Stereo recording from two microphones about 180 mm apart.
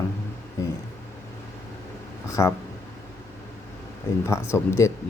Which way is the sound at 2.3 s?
15° left (ahead or behind).